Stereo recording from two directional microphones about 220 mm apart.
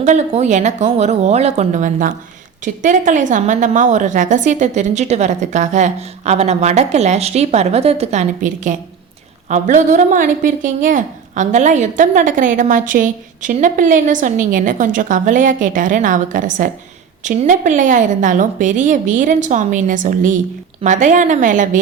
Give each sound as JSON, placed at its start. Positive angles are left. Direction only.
{"t": 0.0, "sound": "a woman's voice", "side_deg": -30}